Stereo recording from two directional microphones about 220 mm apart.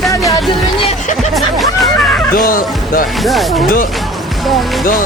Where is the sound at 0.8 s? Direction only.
30° left (ahead or behind).